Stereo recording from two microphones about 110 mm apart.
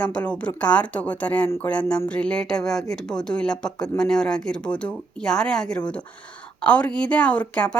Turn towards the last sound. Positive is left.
turn(degrees=10)  # may be behind; listen again after turning